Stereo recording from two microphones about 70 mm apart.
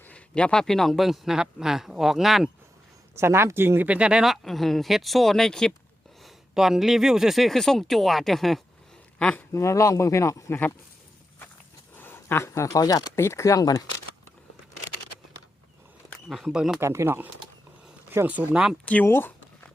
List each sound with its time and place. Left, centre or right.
0.0 s speech: centre
3.2 s speech: right
3.8 s speech: centre
4.3 s speech: centre
6.2 s speech: centre
9.1 s speech: centre
9.5 s speech: left
11.9 s speech: left
13.1 s speech: left
16.5 s speech: centre
16.8 s speech: right
18.5 s speech: centre
19.0 s speech: left